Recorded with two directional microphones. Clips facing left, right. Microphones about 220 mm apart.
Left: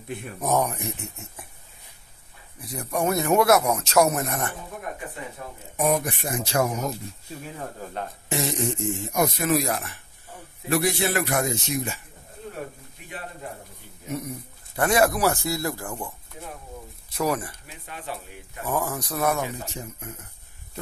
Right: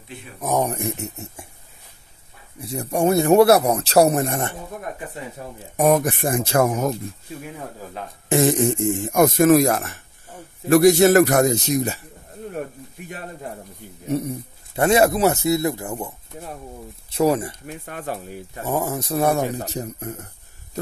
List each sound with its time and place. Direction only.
0.7 s speech: 45° right (ahead or behind)
2.6 s speech: 30° right (ahead or behind)
5.8 s a man's voice: 45° right (ahead or behind)
7.8 s speech: centre (ahead or behind)
8.3 s a man's voice: 50° right (ahead or behind)
14.0 s speech: 30° right (ahead or behind)
17.1 s speech: 25° right (ahead or behind)
17.6 s a man's voice: 50° right (ahead or behind)
18.6 s speech: 25° right (ahead or behind); by 20.2 s 40° right (ahead or behind)